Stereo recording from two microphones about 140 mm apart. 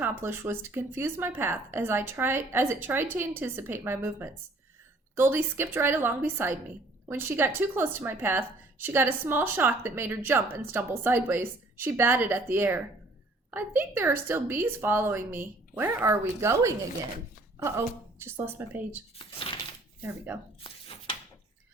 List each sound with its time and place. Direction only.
0.0 s a woman's voice: 15° right (ahead or behind)
19.2 s shuffling cards: 40° left (ahead or behind)
20.0 s a woman's voice: 15° right (ahead or behind)
20.7 s a sound: 40° left (ahead or behind)